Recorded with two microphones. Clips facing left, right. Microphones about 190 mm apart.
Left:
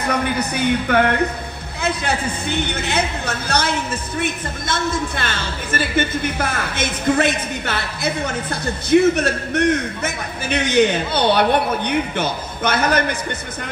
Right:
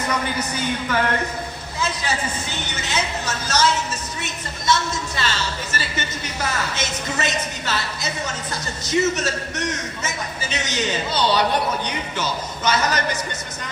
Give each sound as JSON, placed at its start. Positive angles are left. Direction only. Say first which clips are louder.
{"t": 0.0, "sound": "a man's voice", "louder": "left 4 dB", "side_deg": 60}